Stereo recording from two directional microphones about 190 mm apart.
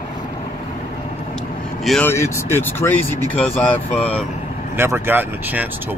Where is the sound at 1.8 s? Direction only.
10° left (ahead or behind).